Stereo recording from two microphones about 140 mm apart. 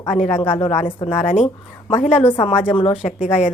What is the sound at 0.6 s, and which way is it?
Speech, 40° left (ahead or behind).